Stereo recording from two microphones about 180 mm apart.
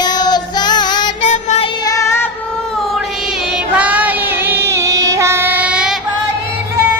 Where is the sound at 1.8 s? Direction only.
20° left (ahead or behind).